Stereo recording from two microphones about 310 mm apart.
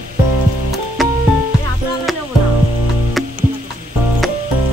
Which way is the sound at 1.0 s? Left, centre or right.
Centre.